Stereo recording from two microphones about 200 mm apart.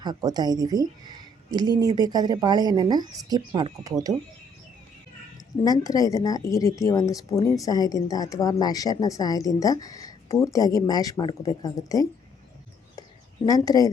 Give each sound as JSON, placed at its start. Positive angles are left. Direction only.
{"t": 0.0, "sound": "speech", "side_deg": -20}
{"t": 5.6, "sound": "a woman's voice", "side_deg": 20}
{"t": 13.0, "sound": "a sound", "side_deg": 20}